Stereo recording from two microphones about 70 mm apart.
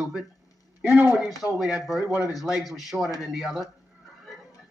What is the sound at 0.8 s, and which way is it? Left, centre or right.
Speech, right.